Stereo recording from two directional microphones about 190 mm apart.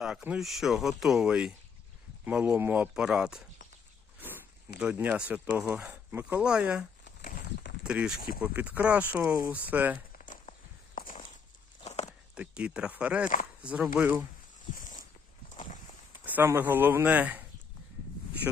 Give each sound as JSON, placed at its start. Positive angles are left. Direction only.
{"t": 0.0, "sound": "speech", "side_deg": -5}
{"t": 4.8, "sound": "speech", "side_deg": -5}
{"t": 7.9, "sound": "speech", "side_deg": -5}
{"t": 10.1, "sound": "walk", "side_deg": 45}
{"t": 10.9, "sound": "horse", "side_deg": 45}
{"t": 11.8, "sound": "walk", "side_deg": 35}
{"t": 12.3, "sound": "speech", "side_deg": -5}
{"t": 14.8, "sound": "a sound", "side_deg": 45}
{"t": 16.1, "sound": "speech", "side_deg": -10}
{"t": 18.5, "sound": "speech", "side_deg": -5}